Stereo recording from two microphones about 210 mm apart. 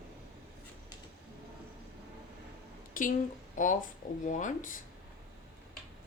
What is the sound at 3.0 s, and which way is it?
A woman's voice, 40° left (ahead or behind).